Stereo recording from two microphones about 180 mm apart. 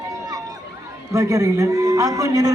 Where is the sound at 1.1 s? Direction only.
20° right (ahead or behind).